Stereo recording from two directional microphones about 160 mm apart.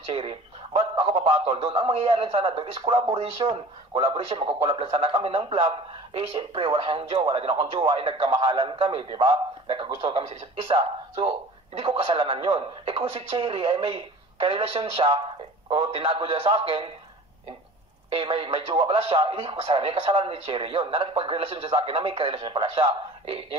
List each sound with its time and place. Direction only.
0.0 s a man's voice: 35° right (ahead or behind)
18.1 s a man's voice: 35° right (ahead or behind)